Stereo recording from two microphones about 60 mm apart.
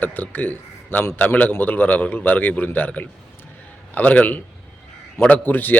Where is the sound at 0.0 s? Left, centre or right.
Left.